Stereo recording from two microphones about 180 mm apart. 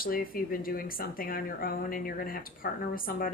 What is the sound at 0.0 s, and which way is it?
Speech, 55° left (ahead or behind).